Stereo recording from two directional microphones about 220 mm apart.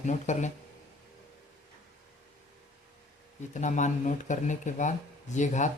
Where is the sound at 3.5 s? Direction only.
35° left (ahead or behind).